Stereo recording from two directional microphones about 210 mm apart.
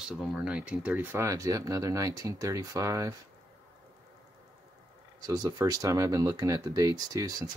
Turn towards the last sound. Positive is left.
turn(degrees=-15)  # may be behind; listen again after turning